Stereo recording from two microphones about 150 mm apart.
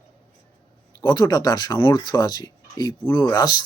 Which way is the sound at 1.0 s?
30° left (ahead or behind).